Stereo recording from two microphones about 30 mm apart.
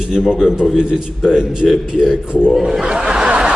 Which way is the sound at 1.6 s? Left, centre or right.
Centre.